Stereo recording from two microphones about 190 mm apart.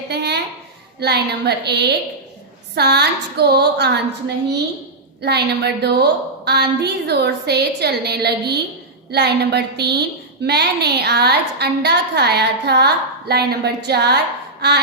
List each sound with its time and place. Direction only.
0.1 s a sound: 60° right (ahead or behind)
0.9 s a woman's voice: 60° right (ahead or behind)
5.2 s a woman's voice: 60° right (ahead or behind)